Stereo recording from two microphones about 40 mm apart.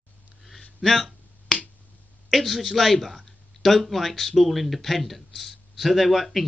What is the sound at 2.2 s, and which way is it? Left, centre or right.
A man's voice, centre.